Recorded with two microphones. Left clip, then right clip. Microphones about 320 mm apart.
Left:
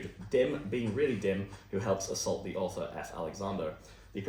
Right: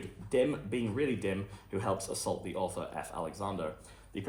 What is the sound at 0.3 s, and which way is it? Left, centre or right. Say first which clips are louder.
Speech: left 1 dB; right.